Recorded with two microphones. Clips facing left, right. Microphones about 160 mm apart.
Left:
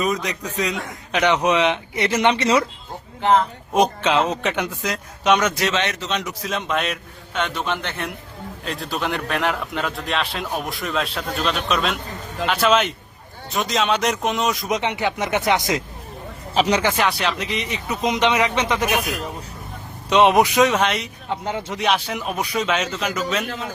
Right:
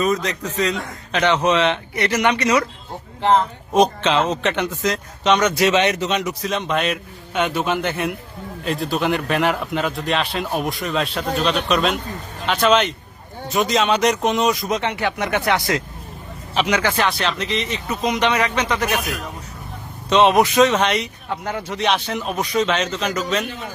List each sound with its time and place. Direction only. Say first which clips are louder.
0.0 s a man's voice: right 3 dB; 10° left (ahead or behind)
2.1 s speech: even; 25° left (ahead or behind)
3.3 s a man's voice: right 2 dB; 5° left (ahead or behind)
5.7 s speech: right 5 dB; 15° right (ahead or behind)
6.4 s a man's voice: right 2 dB; centre (ahead or behind)
14.7 s speech: even; 15° left (ahead or behind)
16.6 s speech: left 1 dB; 35° left (ahead or behind)
16.8 s a man's voice: even; 10° left (ahead or behind)
20.1 s a man's voice: even; 15° left (ahead or behind)
21.2 s speech: even; 20° left (ahead or behind)
21.8 s a man's voice: right 1 dB; 5° left (ahead or behind)